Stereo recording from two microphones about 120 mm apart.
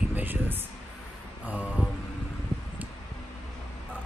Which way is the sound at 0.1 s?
15° right (ahead or behind).